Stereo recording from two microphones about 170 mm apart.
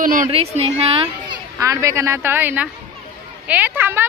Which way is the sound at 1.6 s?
15° right (ahead or behind).